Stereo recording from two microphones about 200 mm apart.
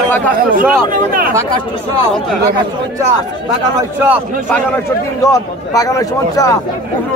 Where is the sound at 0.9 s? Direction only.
45° right (ahead or behind).